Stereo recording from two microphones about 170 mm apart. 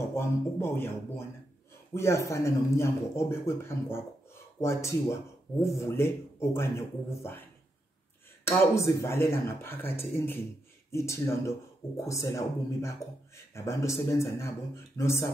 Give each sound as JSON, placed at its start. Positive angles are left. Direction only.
{"t": 0.1, "sound": "speech", "side_deg": 15}
{"t": 8.5, "sound": "speech", "side_deg": 15}